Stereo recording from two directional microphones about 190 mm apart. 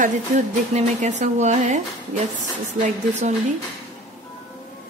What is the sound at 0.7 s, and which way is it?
Speech, 40° right (ahead or behind).